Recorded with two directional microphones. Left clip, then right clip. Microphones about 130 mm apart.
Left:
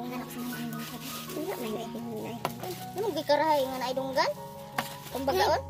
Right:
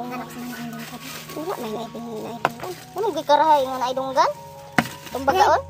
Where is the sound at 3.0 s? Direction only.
20° left (ahead or behind).